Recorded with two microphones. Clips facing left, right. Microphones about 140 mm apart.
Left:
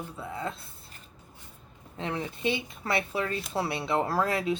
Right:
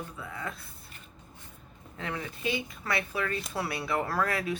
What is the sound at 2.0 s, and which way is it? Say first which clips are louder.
Speech: left 4 dB; 25° left (ahead or behind).